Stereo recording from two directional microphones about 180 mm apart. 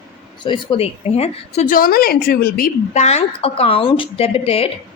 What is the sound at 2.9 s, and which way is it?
A woman's voice, 40° left (ahead or behind).